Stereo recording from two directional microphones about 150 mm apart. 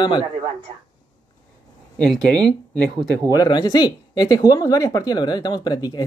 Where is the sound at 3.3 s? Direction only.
25° left (ahead or behind).